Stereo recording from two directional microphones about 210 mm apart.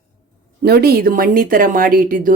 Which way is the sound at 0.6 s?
50° right (ahead or behind).